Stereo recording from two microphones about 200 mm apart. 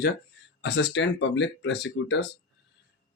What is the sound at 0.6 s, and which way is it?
Speech, 60° left (ahead or behind).